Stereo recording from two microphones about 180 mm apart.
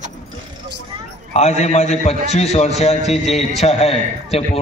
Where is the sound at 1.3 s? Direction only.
40° left (ahead or behind).